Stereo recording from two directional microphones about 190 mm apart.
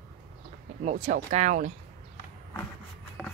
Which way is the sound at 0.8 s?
40° right (ahead or behind).